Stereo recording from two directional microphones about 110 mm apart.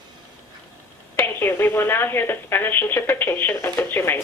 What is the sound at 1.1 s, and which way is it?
Speech, 20° left (ahead or behind).